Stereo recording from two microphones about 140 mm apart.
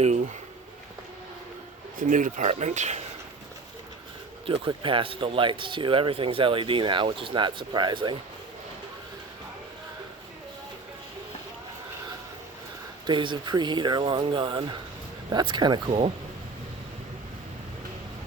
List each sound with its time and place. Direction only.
2.0 s speech: 70° right (ahead or behind)
4.4 s speech: 35° right (ahead or behind)
13.1 s speech: 35° right (ahead or behind)